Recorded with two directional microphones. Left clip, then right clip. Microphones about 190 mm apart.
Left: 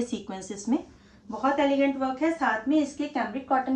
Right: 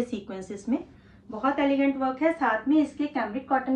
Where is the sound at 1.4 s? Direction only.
10° left (ahead or behind).